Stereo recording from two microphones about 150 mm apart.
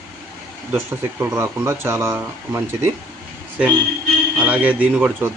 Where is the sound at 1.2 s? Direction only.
15° right (ahead or behind).